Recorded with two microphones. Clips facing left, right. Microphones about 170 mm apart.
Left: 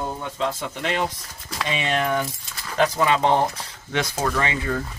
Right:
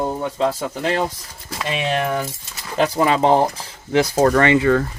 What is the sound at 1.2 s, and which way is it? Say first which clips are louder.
Speech: right 1 dB; centre (ahead or behind).